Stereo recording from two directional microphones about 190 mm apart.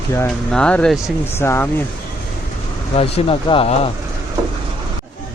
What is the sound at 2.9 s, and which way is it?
Speech, 30° left (ahead or behind).